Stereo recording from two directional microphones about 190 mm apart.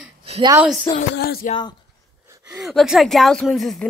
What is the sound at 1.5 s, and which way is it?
Speech, 25° left (ahead or behind).